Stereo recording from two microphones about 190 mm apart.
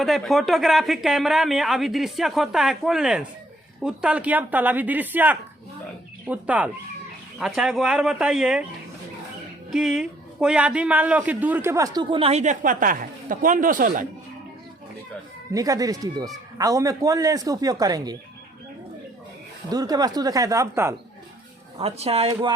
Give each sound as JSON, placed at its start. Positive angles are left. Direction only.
{"t": 0.0, "sound": "speech", "side_deg": 0}
{"t": 9.7, "sound": "a man's voice", "side_deg": -5}
{"t": 15.5, "sound": "a man's voice", "side_deg": -20}
{"t": 19.7, "sound": "a man's voice", "side_deg": -20}
{"t": 21.8, "sound": "speech", "side_deg": -30}